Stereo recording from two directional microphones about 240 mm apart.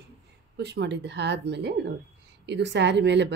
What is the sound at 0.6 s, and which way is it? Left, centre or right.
Speech, right.